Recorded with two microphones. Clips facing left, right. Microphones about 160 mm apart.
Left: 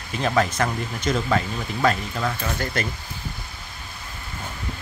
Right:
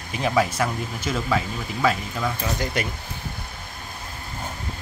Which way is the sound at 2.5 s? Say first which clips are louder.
Right 1 dB; 15° right (ahead or behind).